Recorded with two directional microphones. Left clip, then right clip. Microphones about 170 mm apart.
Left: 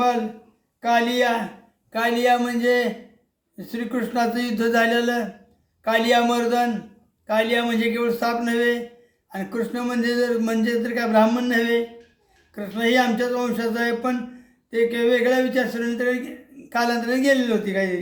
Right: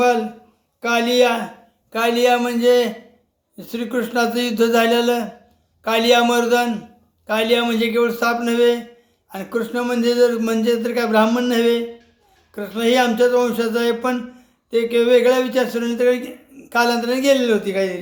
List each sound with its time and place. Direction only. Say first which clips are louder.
0.8 s a man's voice: right 4 dB; 20° right (ahead or behind)